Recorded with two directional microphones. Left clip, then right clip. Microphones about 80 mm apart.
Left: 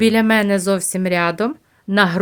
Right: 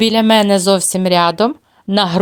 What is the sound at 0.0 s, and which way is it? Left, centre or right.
A woman's voice, right.